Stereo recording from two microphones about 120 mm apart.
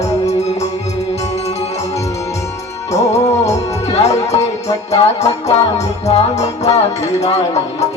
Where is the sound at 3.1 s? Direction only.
65° left (ahead or behind).